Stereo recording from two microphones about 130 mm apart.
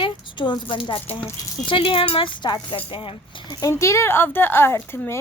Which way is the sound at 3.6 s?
20° left (ahead or behind).